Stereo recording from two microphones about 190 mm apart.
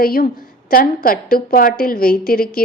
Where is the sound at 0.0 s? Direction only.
50° left (ahead or behind).